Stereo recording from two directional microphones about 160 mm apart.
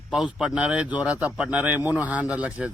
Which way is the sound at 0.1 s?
5° right (ahead or behind).